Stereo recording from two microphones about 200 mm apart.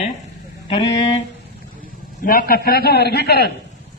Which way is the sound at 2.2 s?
45° left (ahead or behind).